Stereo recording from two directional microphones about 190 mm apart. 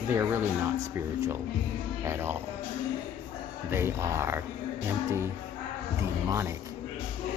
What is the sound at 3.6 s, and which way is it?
Speech, 10° right (ahead or behind).